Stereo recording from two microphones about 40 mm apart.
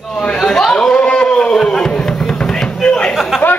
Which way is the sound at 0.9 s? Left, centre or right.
Left.